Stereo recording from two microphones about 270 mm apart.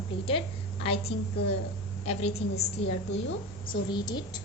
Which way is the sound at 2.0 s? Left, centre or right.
Left.